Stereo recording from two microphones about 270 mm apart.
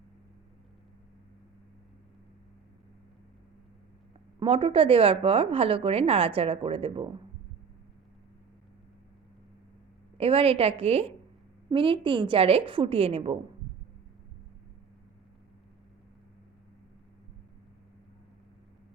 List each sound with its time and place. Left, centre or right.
4.4 s a woman's voice: centre
10.2 s a woman's voice: right